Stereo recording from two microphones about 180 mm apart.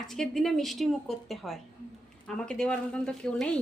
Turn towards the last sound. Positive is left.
turn(degrees=5)  # may be behind; listen again after turning